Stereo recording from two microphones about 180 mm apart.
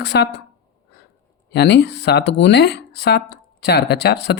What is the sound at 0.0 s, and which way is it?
Speech, 65° left (ahead or behind).